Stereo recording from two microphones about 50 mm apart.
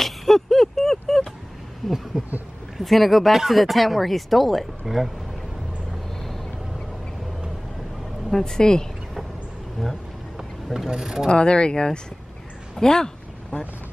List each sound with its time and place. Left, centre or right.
0.0 s a sound: centre
1.8 s speech: centre
8.3 s pulleys: centre
10.3 s vehicle: centre
11.2 s pulleys: centre
12.7 s a sound: centre